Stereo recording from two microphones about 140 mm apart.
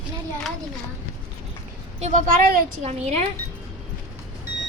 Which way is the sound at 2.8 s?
55° right (ahead or behind).